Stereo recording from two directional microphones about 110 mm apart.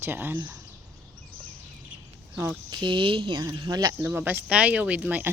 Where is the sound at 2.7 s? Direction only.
45° right (ahead or behind).